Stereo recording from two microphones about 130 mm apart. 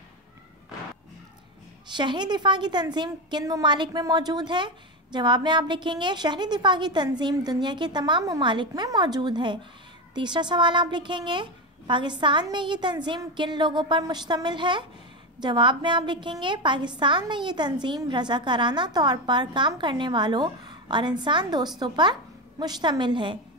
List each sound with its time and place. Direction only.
1.9 s a woman's voice: 35° right (ahead or behind)